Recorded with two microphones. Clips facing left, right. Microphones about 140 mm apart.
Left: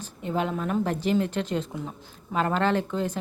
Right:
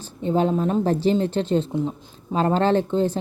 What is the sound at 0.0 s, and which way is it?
Speech, 30° right (ahead or behind).